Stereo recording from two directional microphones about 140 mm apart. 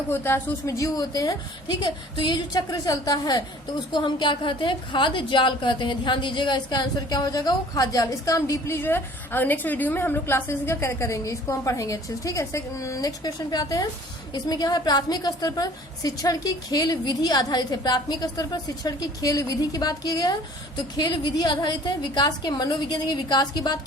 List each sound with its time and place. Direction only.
0.1 s a woman's voice: 15° left (ahead or behind)